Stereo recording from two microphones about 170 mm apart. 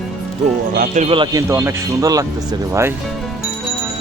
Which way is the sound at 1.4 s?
15° right (ahead or behind).